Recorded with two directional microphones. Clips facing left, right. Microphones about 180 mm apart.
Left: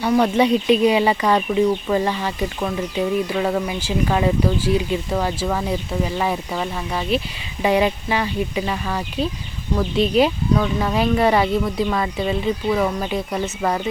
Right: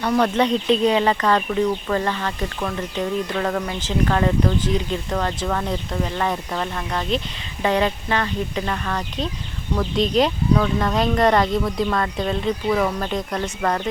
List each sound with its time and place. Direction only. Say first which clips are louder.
0.0 s speech: left 2 dB; 10° left (ahead or behind)